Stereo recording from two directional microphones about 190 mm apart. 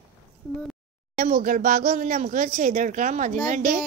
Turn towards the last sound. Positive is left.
turn(degrees=-45)  # may be behind; listen again after turning